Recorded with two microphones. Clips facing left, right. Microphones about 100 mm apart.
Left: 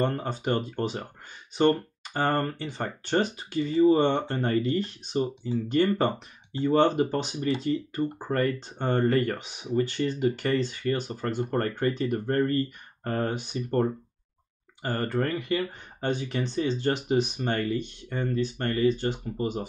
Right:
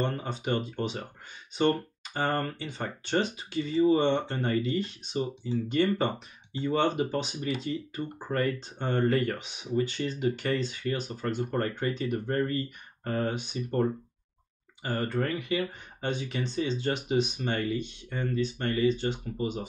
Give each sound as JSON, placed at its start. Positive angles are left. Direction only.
{"t": 0.0, "sound": "speech", "side_deg": 45}